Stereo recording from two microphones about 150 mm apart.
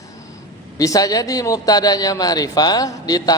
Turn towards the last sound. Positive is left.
turn(degrees=25)  # may be behind; listen again after turning